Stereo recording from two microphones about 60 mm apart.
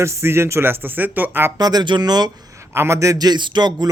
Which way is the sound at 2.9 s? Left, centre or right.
Right.